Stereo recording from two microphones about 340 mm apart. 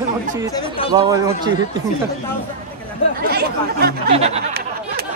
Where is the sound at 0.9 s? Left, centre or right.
Centre.